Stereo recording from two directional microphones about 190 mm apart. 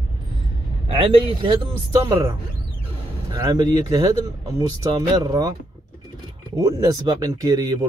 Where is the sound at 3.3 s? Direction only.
20° right (ahead or behind).